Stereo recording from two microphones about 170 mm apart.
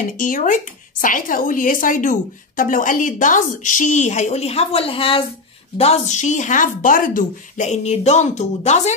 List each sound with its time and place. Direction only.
0.2 s a woman's voice: 50° left (ahead or behind)